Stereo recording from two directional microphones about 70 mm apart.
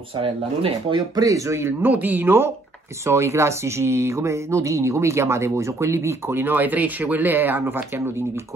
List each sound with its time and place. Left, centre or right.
1.1 s speech: right
1.5 s speech: right